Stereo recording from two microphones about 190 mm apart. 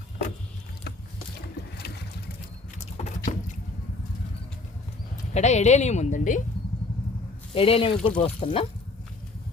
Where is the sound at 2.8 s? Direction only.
35° left (ahead or behind).